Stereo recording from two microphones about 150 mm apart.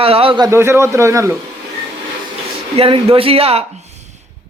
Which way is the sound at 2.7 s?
40° right (ahead or behind).